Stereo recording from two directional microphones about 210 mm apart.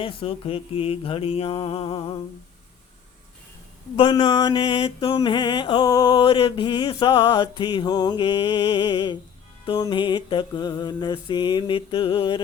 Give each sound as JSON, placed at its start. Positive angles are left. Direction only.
{"t": 0.0, "sound": "mantra", "side_deg": 25}
{"t": 3.9, "sound": "mantra", "side_deg": 20}